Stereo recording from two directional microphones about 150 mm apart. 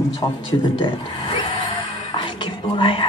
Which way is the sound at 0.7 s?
35° left (ahead or behind).